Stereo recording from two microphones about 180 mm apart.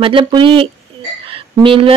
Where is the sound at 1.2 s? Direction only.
30° right (ahead or behind).